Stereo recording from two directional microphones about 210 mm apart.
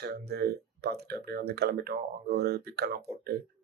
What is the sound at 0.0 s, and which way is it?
Speech, 50° right (ahead or behind).